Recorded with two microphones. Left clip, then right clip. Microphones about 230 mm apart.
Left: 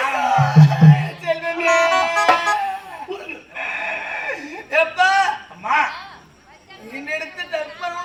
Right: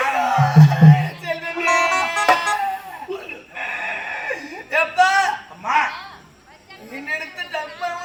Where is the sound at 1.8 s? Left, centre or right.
Left.